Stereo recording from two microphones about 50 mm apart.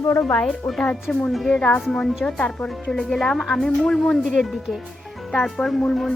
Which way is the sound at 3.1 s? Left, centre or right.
Centre.